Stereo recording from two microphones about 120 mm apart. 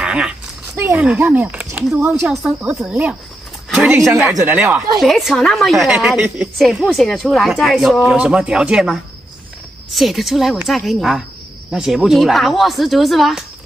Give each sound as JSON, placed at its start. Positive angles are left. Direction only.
{"t": 0.0, "sound": "a sound", "side_deg": -10}
{"t": 0.7, "sound": "speech", "side_deg": -15}
{"t": 2.2, "sound": "speech", "side_deg": -5}
{"t": 4.5, "sound": "speech", "side_deg": -15}
{"t": 5.0, "sound": "a woman's voice", "side_deg": 0}